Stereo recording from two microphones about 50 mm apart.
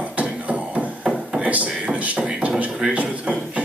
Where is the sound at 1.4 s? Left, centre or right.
Right.